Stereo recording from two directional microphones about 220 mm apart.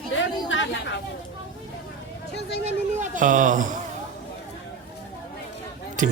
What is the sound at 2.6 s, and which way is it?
A man's voice, 35° right (ahead or behind).